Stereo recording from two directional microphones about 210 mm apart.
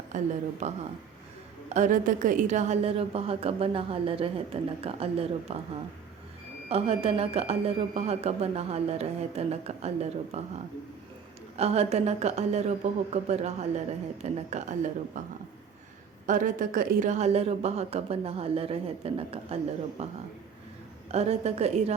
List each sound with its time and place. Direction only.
0.1 s a woman's voice: 35° right (ahead or behind)
6.7 s a woman's voice: 30° right (ahead or behind)
16.2 s a woman's voice: 40° right (ahead or behind)